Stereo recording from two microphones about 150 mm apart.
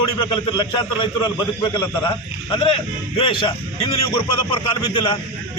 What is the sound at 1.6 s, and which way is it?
A man's voice, 30° left (ahead or behind).